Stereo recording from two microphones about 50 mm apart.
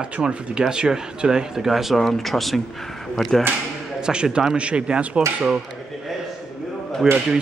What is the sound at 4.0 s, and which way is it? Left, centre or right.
A man's voice, centre.